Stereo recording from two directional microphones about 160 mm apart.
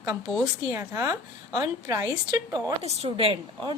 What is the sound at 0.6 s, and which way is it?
A woman's voice, 20° right (ahead or behind).